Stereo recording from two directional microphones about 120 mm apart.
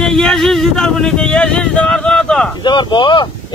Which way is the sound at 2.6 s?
40° left (ahead or behind).